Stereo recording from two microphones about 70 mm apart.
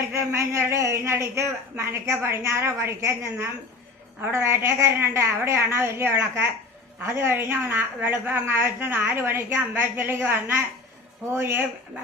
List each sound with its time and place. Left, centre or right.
0.1 s a woman's voice: right